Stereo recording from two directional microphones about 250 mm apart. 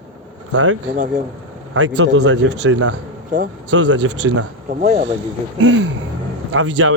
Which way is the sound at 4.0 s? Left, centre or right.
Right.